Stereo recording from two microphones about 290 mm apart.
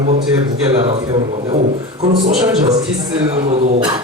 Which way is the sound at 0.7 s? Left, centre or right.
Centre.